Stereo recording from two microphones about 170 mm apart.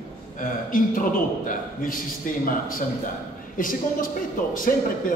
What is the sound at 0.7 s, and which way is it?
A man's voice, 55° left (ahead or behind).